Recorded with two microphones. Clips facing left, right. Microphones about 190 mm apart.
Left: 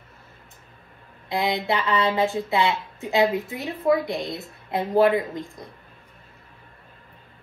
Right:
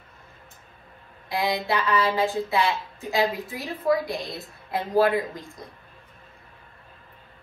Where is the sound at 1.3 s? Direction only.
20° left (ahead or behind).